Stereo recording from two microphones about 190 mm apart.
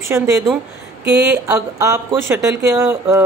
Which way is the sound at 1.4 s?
15° right (ahead or behind).